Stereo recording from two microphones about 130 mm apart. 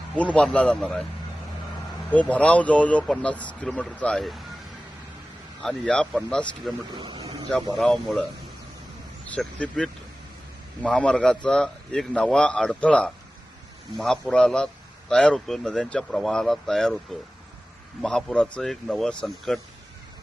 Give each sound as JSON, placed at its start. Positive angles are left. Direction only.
{"t": 0.3, "sound": "speech", "side_deg": 10}
{"t": 2.0, "sound": "speech", "side_deg": 10}
{"t": 5.6, "sound": "speech", "side_deg": 5}
{"t": 6.9, "sound": "speech", "side_deg": -40}
{"t": 7.8, "sound": "speech", "side_deg": 5}
{"t": 9.3, "sound": "speech", "side_deg": 10}